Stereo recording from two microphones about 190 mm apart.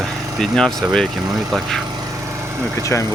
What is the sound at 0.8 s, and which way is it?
Speech, centre (ahead or behind).